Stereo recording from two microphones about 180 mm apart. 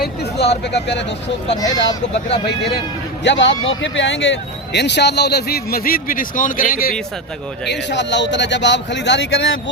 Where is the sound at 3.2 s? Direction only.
90° left; by 6.9 s 50° left (ahead or behind).